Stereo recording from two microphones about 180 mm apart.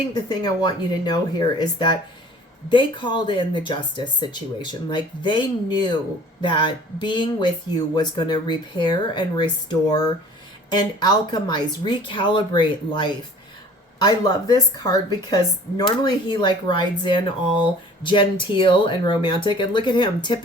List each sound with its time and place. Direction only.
0.1 s speech: 25° left (ahead or behind)
11.3 s speech: 25° left (ahead or behind)